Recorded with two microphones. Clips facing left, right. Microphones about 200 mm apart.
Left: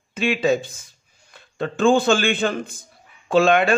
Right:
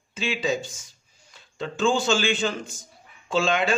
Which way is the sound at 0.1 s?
60° left (ahead or behind).